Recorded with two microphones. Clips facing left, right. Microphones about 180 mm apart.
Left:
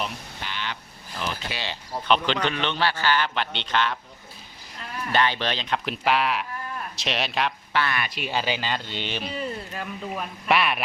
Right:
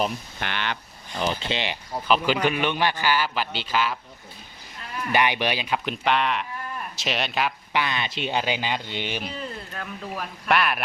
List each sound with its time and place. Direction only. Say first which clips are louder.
0.4 s speech: right 4 dB; 65° right (ahead or behind)
1.2 s speech: right 5 dB; 25° right (ahead or behind)
2.0 s a man's voice: right 2 dB; 5° right (ahead or behind)
5.1 s speech: right 1 dB; 15° right (ahead or behind)
7.7 s a man's voice: even; 15° right (ahead or behind)
9.7 s speech: left 1 dB; centre (ahead or behind)